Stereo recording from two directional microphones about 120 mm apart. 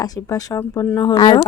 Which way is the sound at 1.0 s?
35° left (ahead or behind).